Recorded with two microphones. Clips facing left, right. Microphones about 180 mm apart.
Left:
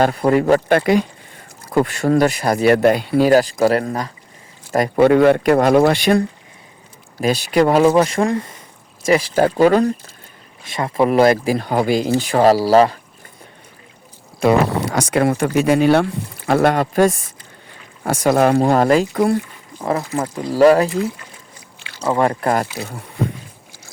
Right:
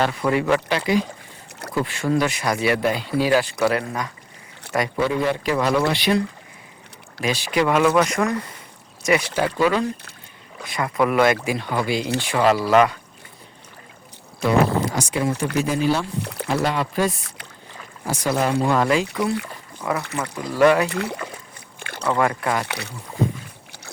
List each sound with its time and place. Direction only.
0.0 s speech: 40° left (ahead or behind)
4.7 s speech: 50° left (ahead or behind)
10.7 s speech: 25° left (ahead or behind)
14.4 s speech: 70° left (ahead or behind)
16.2 s speech: 70° right (ahead or behind)
16.5 s speech: 55° left (ahead or behind)
19.1 s speech: 60° left (ahead or behind)
20.3 s speech: 45° left (ahead or behind)
20.9 s speech: 70° right (ahead or behind)
21.8 s rowboat: 55° right (ahead or behind)
22.2 s speech: 40° left (ahead or behind)
22.6 s speech: 70° right (ahead or behind)